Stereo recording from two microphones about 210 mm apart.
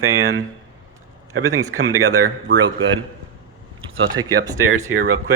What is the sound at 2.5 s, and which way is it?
Speech, 35° right (ahead or behind).